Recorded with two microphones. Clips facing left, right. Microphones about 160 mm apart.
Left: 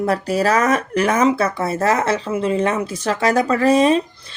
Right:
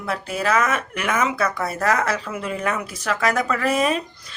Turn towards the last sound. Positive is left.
turn(degrees=30)  # may be behind; listen again after turning